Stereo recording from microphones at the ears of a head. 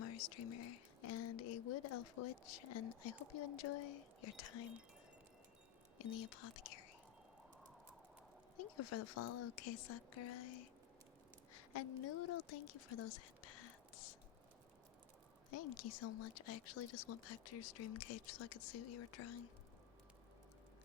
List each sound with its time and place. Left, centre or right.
0.0 s speech: left
6.0 s speech: left
8.5 s speech: left
15.4 s speech: left